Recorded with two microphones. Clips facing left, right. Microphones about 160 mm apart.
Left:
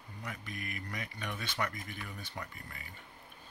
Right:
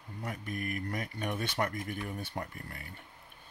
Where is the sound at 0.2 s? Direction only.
50° right (ahead or behind).